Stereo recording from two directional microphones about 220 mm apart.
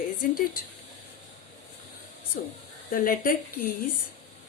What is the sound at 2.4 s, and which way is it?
Speech, 40° left (ahead or behind).